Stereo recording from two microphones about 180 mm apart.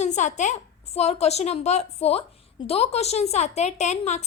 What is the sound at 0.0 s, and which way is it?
A woman's voice, 40° left (ahead or behind).